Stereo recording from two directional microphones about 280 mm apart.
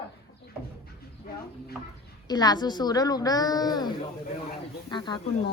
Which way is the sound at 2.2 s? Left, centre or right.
Centre.